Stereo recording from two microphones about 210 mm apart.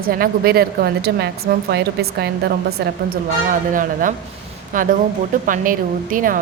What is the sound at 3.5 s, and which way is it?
Speech, 40° right (ahead or behind).